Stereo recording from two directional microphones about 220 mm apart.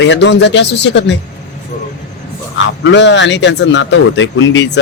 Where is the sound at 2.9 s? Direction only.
55° left (ahead or behind).